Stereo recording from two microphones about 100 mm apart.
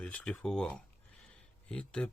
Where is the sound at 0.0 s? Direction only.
10° left (ahead or behind).